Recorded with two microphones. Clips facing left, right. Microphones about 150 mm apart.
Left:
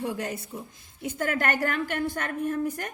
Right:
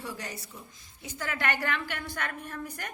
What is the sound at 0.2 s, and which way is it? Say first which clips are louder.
A woman's voice: left 8 dB; 55° left (ahead or behind).